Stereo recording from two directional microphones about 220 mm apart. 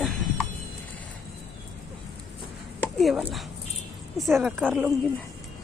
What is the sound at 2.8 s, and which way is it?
A woman's voice, centre (ahead or behind).